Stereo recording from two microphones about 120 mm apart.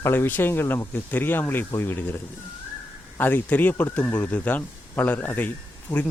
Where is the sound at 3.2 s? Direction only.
15° left (ahead or behind).